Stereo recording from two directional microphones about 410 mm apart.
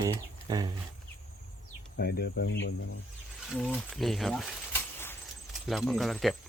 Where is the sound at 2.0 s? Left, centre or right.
Left.